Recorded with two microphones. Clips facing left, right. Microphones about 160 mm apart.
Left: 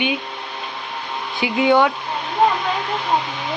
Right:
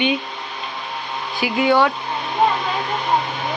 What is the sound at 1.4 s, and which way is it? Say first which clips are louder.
Speech: left 1 dB; 20° left (ahead or behind).